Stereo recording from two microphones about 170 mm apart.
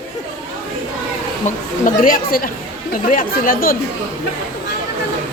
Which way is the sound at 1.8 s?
55° left (ahead or behind).